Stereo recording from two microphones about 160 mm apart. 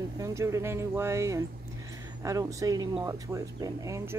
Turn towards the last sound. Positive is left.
turn(degrees=-20)  # may be behind; listen again after turning